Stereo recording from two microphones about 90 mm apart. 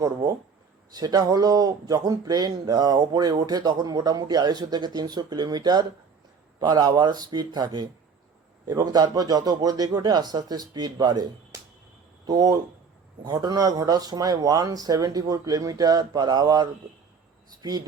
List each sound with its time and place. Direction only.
0.9 s speech: 45° right (ahead or behind)